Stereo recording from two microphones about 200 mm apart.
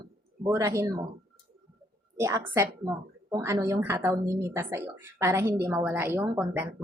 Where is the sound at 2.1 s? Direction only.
15° right (ahead or behind).